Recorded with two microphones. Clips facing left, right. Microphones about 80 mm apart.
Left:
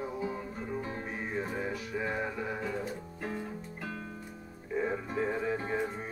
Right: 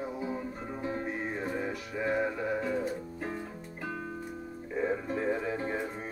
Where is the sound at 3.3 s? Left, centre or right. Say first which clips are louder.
Left 1 dB; centre.